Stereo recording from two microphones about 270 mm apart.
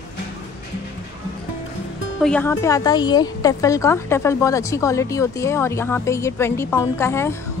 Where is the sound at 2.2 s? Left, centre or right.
Centre.